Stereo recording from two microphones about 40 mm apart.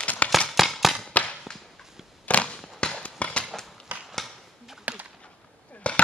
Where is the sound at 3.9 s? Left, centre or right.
Right.